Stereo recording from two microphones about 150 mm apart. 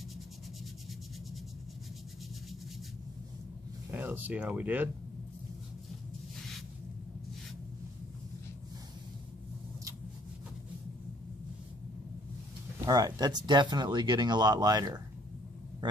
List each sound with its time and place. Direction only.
3.9 s speech: 10° right (ahead or behind)
12.8 s speech: 25° right (ahead or behind)